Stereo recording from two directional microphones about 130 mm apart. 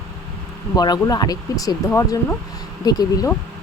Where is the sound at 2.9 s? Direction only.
30° left (ahead or behind).